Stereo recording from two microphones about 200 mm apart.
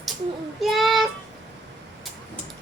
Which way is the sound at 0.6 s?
Centre (ahead or behind).